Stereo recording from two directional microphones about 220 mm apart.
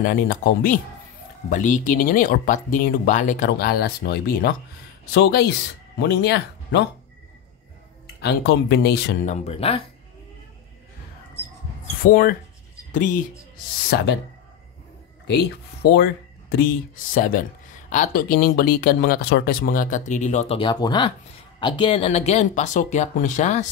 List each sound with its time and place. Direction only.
0.0 s speech: 40° left (ahead or behind)
8.2 s speech: 50° left (ahead or behind)
9.3 s speech: 25° left (ahead or behind)
12.0 s speech: 40° left (ahead or behind)
13.8 s speech: 50° left (ahead or behind)
15.2 s speech: 50° left (ahead or behind); by 23.7 s 30° left (ahead or behind)